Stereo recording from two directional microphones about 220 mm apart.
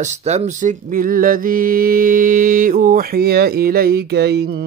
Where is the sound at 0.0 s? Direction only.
35° right (ahead or behind).